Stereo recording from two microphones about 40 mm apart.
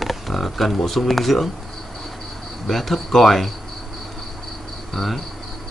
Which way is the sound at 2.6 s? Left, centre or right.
Centre.